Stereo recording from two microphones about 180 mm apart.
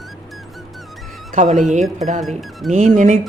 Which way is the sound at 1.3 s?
40° right (ahead or behind).